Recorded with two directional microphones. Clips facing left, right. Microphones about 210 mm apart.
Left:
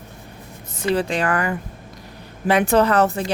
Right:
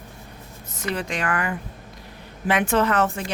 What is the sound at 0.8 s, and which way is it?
Speech, 30° left (ahead or behind).